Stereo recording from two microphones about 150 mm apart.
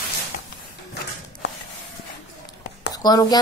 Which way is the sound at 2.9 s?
25° left (ahead or behind).